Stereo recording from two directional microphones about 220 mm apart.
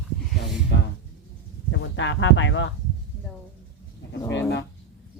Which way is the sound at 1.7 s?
55° left (ahead or behind).